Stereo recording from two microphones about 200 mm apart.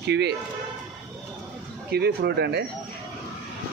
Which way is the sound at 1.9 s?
55° right (ahead or behind).